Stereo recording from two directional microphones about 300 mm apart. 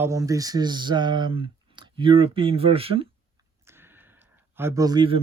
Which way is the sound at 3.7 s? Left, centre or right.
Centre.